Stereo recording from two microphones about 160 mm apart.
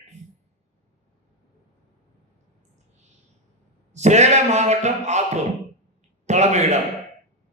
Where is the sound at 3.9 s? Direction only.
45° right (ahead or behind).